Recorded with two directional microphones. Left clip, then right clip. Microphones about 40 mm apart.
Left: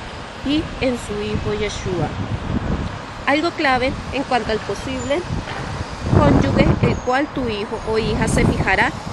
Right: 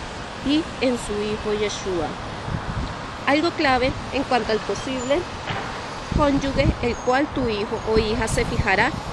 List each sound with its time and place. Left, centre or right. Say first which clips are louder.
0.5 s speech: left 1 dB; left
3.3 s speech: left 2 dB; left